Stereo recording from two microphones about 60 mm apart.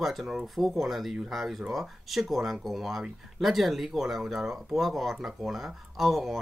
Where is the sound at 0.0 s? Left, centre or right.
Centre.